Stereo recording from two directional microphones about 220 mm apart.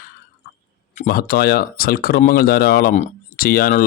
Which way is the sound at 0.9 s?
40° left (ahead or behind).